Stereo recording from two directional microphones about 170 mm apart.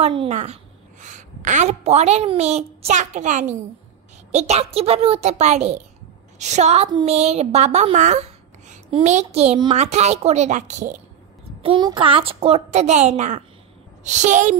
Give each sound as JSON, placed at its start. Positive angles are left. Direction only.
{"t": 0.0, "sound": "a child's voice", "side_deg": -35}
{"t": 11.6, "sound": "a child's voice", "side_deg": -30}